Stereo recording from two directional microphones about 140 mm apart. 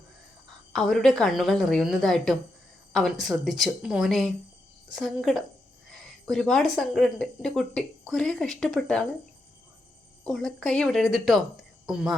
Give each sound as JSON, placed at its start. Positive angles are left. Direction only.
{"t": 0.7, "sound": "speech", "side_deg": 5}
{"t": 5.9, "sound": "a sound", "side_deg": 0}
{"t": 6.7, "sound": "speech", "side_deg": 0}
{"t": 10.2, "sound": "speech", "side_deg": 0}